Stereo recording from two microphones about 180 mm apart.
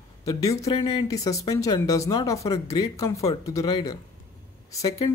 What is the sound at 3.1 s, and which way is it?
Speech, 35° left (ahead or behind).